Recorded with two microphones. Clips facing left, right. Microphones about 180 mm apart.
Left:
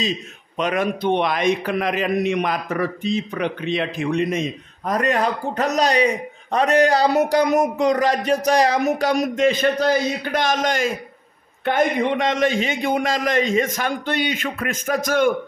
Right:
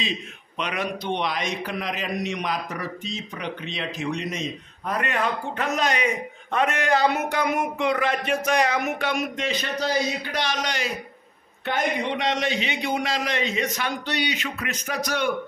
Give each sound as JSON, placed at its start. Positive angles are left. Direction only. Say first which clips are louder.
{"t": 0.6, "sound": "a man's voice", "louder": "left 7 dB", "side_deg": 45}